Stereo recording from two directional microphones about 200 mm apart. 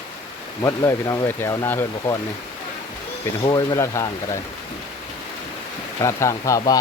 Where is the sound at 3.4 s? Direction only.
20° left (ahead or behind).